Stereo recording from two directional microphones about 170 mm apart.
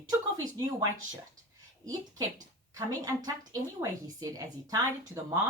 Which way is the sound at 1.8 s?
20° right (ahead or behind).